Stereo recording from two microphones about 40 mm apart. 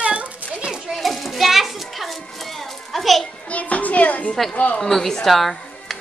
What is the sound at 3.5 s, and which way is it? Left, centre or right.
Speech, left.